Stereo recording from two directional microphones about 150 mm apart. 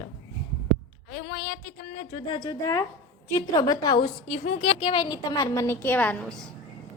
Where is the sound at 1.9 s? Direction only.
45° left (ahead or behind).